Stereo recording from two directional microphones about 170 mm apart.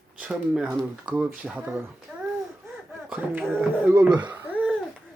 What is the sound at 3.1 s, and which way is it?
Speech, 10° right (ahead or behind).